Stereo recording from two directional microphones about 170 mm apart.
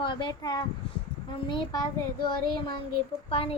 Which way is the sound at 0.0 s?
30° left (ahead or behind).